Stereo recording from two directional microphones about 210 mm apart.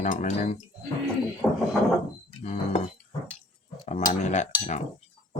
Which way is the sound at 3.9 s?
35° left (ahead or behind).